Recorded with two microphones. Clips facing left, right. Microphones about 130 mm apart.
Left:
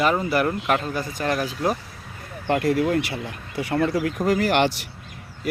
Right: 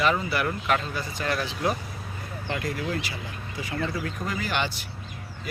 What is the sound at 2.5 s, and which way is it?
Speech, 65° left (ahead or behind).